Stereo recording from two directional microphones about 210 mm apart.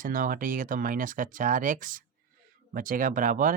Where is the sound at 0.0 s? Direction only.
40° right (ahead or behind).